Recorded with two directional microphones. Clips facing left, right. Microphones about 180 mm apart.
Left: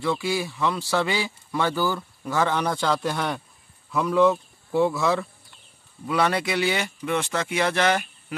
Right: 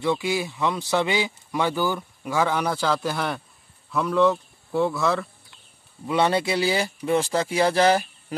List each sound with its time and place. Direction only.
0.0 s speech: 20° right (ahead or behind); by 5.2 s centre (ahead or behind)
6.0 s speech: 25° right (ahead or behind)